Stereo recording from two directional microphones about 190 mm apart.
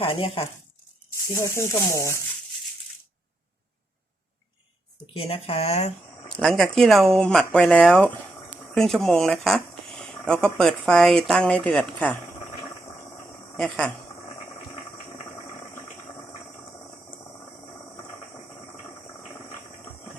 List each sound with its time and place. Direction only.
0.0 s speech: 30° left (ahead or behind)
1.3 s speech: 15° left (ahead or behind)
5.1 s speech: 30° left (ahead or behind)
6.3 s speech: centre (ahead or behind)
13.6 s speech: centre (ahead or behind)